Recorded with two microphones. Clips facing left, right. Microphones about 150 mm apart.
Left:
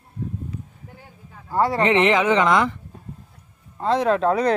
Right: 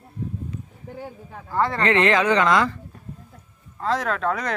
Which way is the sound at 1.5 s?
15° left (ahead or behind).